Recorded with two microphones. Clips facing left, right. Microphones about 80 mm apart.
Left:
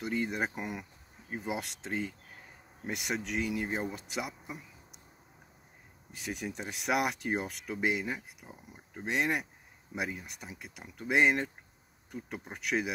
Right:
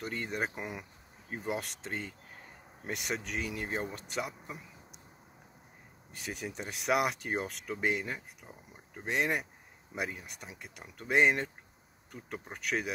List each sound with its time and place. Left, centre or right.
0.0 s speech: centre
6.1 s speech: centre